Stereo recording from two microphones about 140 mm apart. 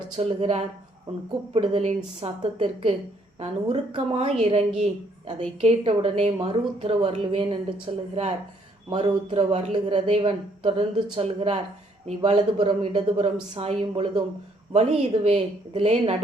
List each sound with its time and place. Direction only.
0.3 s a woman's voice: 50° right (ahead or behind)
12.5 s a woman's voice: 35° right (ahead or behind)
12.9 s a woman's voice: 50° right (ahead or behind)